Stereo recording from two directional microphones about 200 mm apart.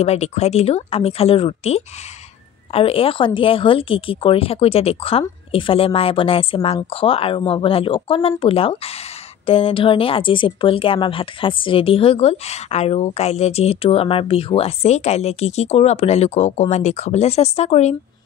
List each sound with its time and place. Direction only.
0.0 s a woman's voice: 30° left (ahead or behind)